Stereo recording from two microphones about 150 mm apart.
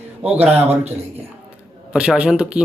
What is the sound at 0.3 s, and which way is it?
Speech, 45° right (ahead or behind).